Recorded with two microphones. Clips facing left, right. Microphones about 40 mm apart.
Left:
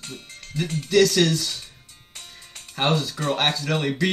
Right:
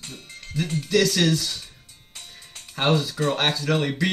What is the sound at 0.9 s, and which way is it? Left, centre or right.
Speech, centre.